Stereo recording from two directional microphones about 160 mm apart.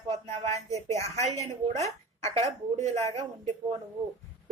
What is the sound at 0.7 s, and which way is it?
A woman's voice, 40° right (ahead or behind).